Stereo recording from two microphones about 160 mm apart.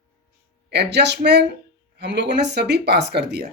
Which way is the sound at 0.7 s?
90° right.